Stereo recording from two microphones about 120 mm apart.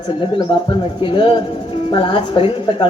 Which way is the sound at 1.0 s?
45° left (ahead or behind).